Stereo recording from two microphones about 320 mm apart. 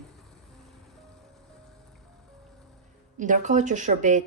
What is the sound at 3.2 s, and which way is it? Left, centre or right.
A woman's voice, right.